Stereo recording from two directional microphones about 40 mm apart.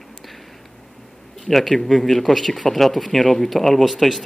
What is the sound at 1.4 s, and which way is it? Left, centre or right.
Speech, centre.